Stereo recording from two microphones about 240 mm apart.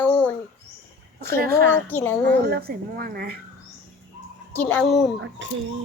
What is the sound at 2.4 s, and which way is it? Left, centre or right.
Speech, right.